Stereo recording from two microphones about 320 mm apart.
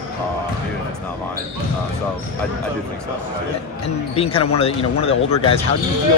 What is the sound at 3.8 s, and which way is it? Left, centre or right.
Speech, centre.